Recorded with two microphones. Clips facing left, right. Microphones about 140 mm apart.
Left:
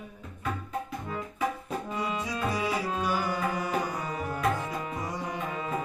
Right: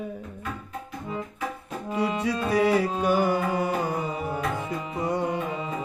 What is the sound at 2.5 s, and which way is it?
Music, 60° right (ahead or behind).